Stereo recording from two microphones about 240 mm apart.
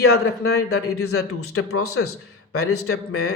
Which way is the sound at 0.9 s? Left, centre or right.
Left.